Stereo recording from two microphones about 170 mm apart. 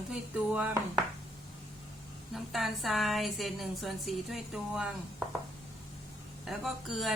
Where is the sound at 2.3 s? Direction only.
Centre (ahead or behind).